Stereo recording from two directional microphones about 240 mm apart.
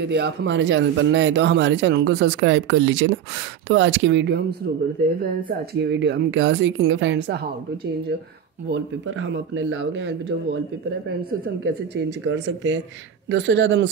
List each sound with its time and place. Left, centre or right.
0.1 s speech: right
5.8 s speech: right
8.6 s speech: right
11.6 s speech: right